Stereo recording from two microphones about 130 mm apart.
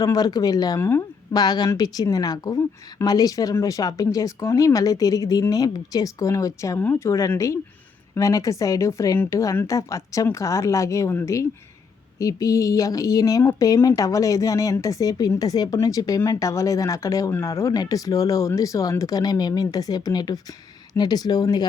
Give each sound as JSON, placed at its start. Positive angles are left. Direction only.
{"t": 0.0, "sound": "speech", "side_deg": 30}